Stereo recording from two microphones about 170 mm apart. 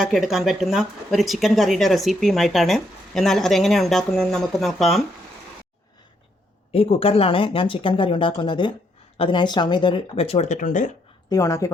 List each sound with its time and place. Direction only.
0.0 s speech: centre (ahead or behind)
6.7 s speech: 35° left (ahead or behind)
11.3 s a woman's voice: 20° left (ahead or behind)